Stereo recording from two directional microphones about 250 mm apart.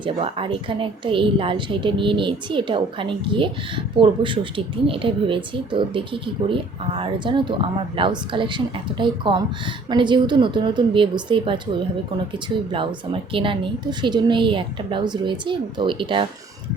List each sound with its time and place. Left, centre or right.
0.0 s speech: right